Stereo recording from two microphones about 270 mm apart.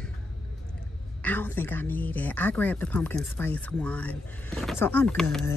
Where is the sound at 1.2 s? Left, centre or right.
Centre.